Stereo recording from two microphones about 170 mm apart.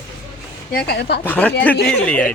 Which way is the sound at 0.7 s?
70° left (ahead or behind).